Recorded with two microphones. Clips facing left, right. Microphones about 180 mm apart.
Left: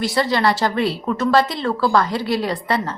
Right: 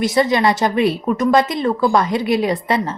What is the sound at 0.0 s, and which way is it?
Speech, 20° right (ahead or behind).